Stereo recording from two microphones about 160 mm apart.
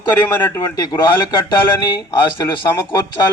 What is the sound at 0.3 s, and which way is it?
Speech, 15° left (ahead or behind).